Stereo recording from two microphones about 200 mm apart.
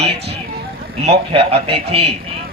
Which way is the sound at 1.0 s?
30° right (ahead or behind).